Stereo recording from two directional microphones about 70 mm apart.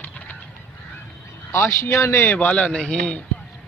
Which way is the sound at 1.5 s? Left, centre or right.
Left.